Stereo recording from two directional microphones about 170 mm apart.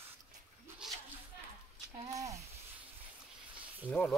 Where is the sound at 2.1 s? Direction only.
20° right (ahead or behind).